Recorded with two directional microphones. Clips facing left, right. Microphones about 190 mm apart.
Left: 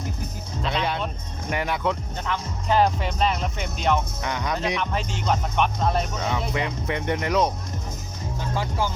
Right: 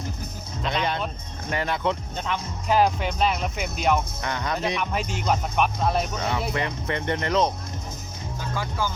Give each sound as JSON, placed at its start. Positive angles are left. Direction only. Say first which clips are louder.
{"t": 0.6, "sound": "speech", "louder": "even", "side_deg": 5}
{"t": 2.1, "sound": "speech", "louder": "even", "side_deg": -20}
{"t": 2.6, "sound": "speech", "louder": "even", "side_deg": -5}
{"t": 4.2, "sound": "speech", "louder": "left 1 dB", "side_deg": 15}
{"t": 4.8, "sound": "speech", "louder": "even", "side_deg": -10}
{"t": 6.5, "sound": "speech", "louder": "left 1 dB", "side_deg": 10}